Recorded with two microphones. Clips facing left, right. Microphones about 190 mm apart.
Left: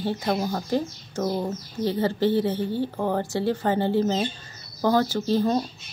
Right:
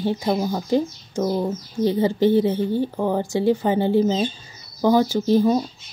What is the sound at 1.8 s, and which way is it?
Speech, 15° right (ahead or behind).